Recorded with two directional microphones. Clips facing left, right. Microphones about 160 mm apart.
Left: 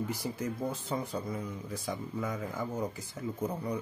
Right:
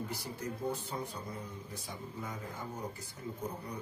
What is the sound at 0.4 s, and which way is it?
Speech, 90° left.